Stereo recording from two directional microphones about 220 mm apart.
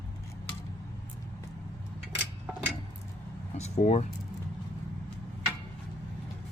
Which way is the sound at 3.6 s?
30° left (ahead or behind).